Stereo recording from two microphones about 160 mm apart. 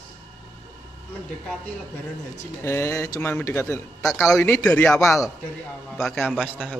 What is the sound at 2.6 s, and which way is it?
A man's voice, 15° left (ahead or behind).